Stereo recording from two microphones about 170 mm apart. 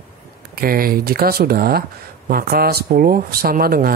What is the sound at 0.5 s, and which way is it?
Speech, 60° right (ahead or behind).